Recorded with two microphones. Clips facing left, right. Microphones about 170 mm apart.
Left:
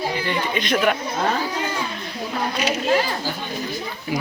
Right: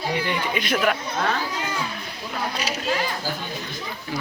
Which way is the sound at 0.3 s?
5° right (ahead or behind).